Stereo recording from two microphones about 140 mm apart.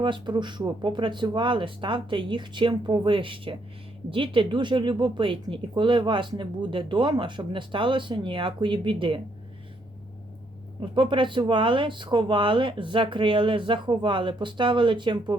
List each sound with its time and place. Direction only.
0.0 s speech: 35° right (ahead or behind)
10.8 s speech: 35° right (ahead or behind)